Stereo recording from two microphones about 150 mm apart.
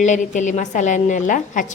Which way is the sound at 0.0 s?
55° left (ahead or behind).